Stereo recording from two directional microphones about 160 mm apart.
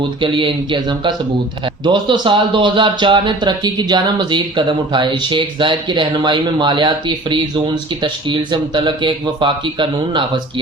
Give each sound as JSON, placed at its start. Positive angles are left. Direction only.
{"t": 0.2, "sound": "a man's voice", "side_deg": -30}